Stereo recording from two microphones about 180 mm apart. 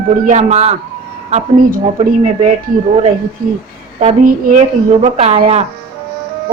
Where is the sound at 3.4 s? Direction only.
50° right (ahead or behind).